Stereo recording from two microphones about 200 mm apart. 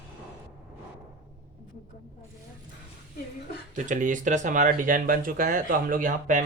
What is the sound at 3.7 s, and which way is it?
Speech, 40° right (ahead or behind).